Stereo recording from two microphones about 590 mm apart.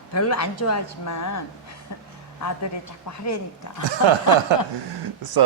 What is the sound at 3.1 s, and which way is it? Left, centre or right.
Speech, left.